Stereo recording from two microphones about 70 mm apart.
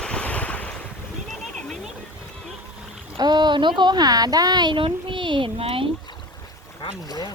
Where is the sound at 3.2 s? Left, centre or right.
Right.